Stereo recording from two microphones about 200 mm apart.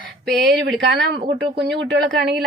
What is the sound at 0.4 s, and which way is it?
Speech, 55° right (ahead or behind).